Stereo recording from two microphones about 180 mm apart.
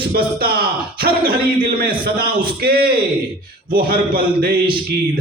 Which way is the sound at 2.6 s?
60° right (ahead or behind).